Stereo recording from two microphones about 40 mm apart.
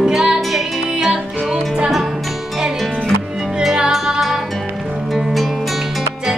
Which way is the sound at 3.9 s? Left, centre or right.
Centre.